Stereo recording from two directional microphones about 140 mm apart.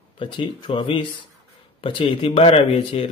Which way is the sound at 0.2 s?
35° left (ahead or behind).